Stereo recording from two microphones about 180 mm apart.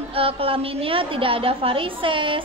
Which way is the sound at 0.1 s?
30° right (ahead or behind).